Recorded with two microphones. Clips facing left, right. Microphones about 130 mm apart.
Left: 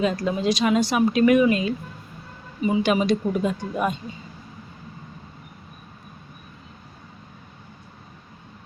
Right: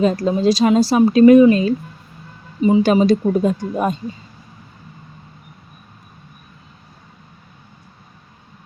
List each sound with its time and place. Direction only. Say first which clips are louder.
0.0 s speech: right 7 dB; 35° right (ahead or behind)